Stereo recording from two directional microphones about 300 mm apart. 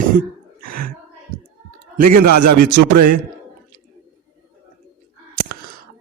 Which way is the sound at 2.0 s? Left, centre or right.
Right.